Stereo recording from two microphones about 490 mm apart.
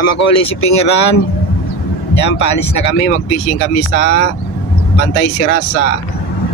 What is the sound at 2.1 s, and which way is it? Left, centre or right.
Speech, left.